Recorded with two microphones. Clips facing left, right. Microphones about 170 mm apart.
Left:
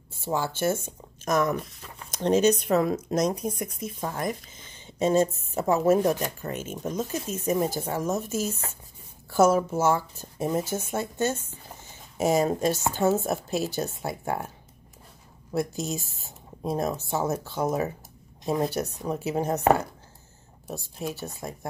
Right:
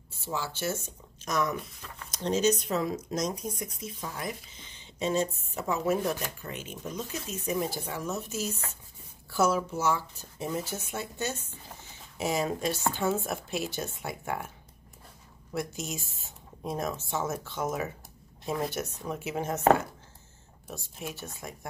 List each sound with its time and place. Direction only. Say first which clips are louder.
0.2 s speech: left 7 dB; 50° left (ahead or behind); by 14.5 s 35° left (ahead or behind)
15.5 s speech: left 6 dB; 35° left (ahead or behind)
20.6 s speech: left 6 dB; 35° left (ahead or behind)